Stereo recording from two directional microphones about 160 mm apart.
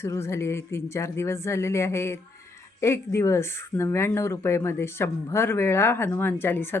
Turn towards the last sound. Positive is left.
turn(degrees=15)  # may be behind; listen again after turning